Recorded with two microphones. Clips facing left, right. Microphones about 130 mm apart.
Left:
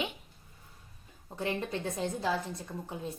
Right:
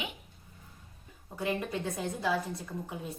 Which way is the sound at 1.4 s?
25° left (ahead or behind).